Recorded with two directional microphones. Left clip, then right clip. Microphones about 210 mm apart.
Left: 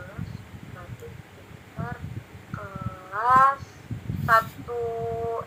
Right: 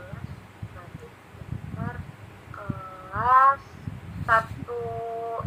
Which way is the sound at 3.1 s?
20° left (ahead or behind).